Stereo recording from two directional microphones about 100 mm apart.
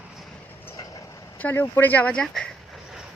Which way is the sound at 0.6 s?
30° left (ahead or behind).